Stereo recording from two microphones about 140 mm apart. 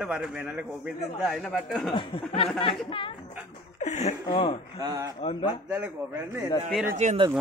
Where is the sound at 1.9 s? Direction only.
40° left (ahead or behind).